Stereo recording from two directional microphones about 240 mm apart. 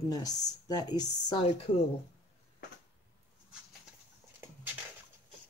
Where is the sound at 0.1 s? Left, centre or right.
Centre.